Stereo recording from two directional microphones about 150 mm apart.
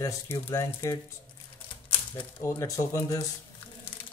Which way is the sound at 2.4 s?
20° left (ahead or behind).